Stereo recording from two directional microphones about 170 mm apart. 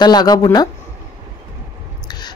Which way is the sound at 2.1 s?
25° left (ahead or behind).